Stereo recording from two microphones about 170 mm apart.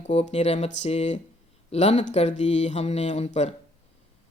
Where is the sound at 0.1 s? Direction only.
40° left (ahead or behind).